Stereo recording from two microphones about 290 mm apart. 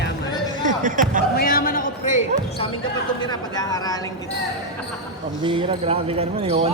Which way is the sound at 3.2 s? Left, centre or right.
Centre.